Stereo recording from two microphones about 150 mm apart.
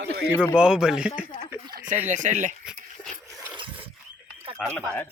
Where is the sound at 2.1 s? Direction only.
55° right (ahead or behind).